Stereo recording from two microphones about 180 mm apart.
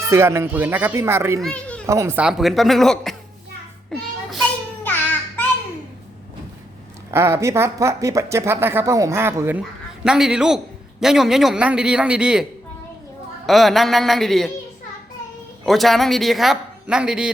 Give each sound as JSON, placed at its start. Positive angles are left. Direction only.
{"t": 0.1, "sound": "speech", "side_deg": -15}
{"t": 1.4, "sound": "a child's voice", "side_deg": 5}
{"t": 1.9, "sound": "speech", "side_deg": -15}
{"t": 3.8, "sound": "a sound", "side_deg": 0}
{"t": 4.8, "sound": "a sound", "side_deg": 10}
{"t": 7.1, "sound": "speech", "side_deg": -15}
{"t": 13.5, "sound": "speech", "side_deg": 0}
{"t": 15.6, "sound": "speech", "side_deg": 0}